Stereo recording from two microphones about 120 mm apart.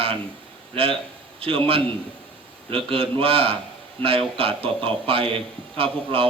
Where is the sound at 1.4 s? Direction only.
50° right (ahead or behind).